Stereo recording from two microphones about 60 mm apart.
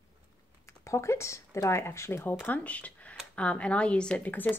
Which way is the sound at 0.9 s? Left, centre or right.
Left.